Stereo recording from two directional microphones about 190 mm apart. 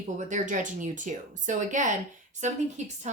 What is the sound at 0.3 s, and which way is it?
Speech, 40° right (ahead or behind).